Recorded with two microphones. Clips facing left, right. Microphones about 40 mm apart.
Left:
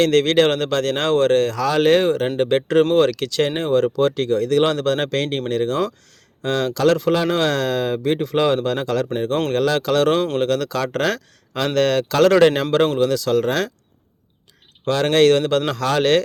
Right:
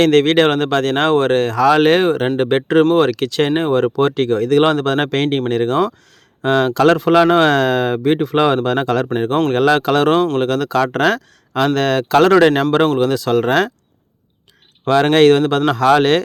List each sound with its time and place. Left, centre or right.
0.0 s speech: right
3.8 s speech: right; by 12.6 s centre
13.0 s speech: right
14.8 s speech: right